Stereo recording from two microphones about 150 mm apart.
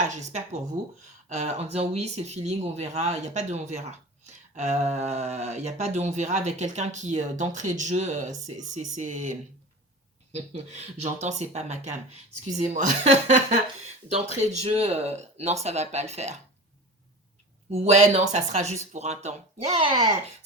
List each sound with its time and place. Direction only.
0.0 s speech: 50° right (ahead or behind)
17.7 s speech: 45° right (ahead or behind)